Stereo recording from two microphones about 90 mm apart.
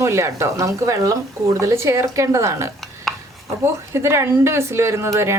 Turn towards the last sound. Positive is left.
turn(degrees=-30)  # may be behind; listen again after turning